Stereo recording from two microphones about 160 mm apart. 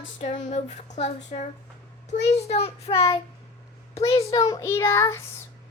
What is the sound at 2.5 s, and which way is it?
Speech, 40° left (ahead or behind).